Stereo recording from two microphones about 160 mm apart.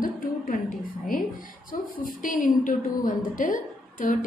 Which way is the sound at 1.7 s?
55° left (ahead or behind).